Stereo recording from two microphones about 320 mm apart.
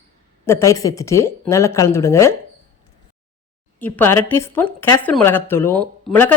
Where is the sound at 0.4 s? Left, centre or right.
Centre.